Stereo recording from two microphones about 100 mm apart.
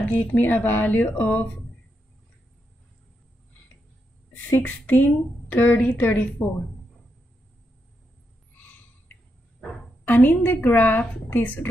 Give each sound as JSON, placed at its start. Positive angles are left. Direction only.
{"t": 0.1, "sound": "a woman's voice", "side_deg": 20}
{"t": 4.5, "sound": "a woman's voice", "side_deg": 15}
{"t": 10.0, "sound": "a woman's voice", "side_deg": 20}